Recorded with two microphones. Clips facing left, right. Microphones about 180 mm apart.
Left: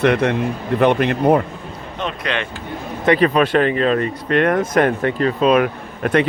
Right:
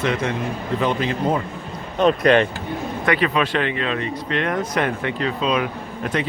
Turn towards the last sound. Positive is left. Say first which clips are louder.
# left 7 dB
turn(degrees=55)  # may be behind; listen again after turning